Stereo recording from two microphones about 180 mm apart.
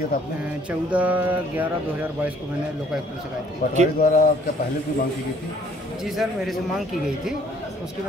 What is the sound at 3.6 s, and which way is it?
Speech, 60° left (ahead or behind).